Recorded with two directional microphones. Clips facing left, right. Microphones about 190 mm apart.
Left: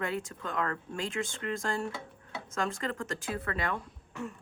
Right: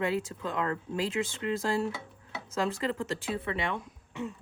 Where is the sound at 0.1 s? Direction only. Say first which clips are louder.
Right 3 dB; 30° right (ahead or behind).